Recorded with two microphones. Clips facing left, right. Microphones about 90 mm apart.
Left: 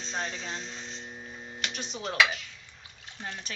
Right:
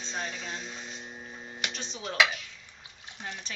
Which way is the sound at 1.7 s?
5° left (ahead or behind).